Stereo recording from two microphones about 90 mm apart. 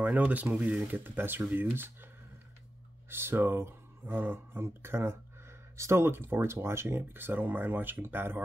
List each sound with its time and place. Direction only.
0.0 s speech: 20° right (ahead or behind)
3.1 s speech: 25° right (ahead or behind)